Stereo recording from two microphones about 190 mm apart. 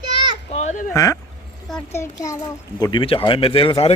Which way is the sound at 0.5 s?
40° left (ahead or behind).